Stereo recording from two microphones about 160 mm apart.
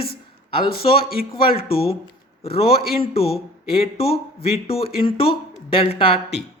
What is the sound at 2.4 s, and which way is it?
A man's voice, 35° left (ahead or behind).